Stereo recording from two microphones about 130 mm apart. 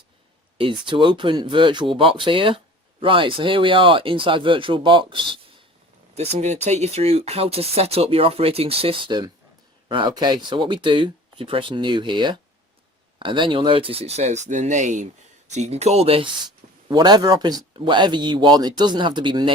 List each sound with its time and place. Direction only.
0.6 s speech: 40° right (ahead or behind)
6.1 s speech: 55° right (ahead or behind)
15.5 s speech: 60° right (ahead or behind)
16.9 s speech: 30° right (ahead or behind)